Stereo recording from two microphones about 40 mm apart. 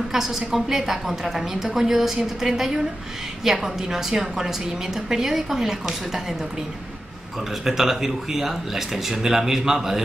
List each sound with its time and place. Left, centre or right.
0.1 s a woman's voice: centre
7.6 s a woman's voice: centre